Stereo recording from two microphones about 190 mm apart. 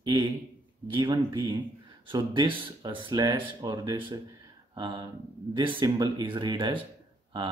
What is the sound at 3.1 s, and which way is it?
Speech, 15° right (ahead or behind).